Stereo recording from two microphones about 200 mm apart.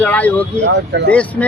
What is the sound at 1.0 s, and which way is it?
Speech, 5° left (ahead or behind).